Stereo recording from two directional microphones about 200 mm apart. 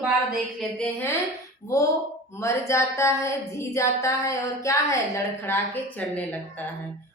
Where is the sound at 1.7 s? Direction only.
15° left (ahead or behind).